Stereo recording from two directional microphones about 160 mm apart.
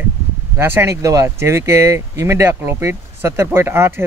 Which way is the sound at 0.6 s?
15° right (ahead or behind).